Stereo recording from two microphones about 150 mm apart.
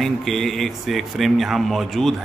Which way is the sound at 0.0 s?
Centre (ahead or behind).